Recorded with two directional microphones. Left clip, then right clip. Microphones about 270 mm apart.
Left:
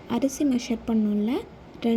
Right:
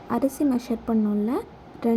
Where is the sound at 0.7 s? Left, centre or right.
Left.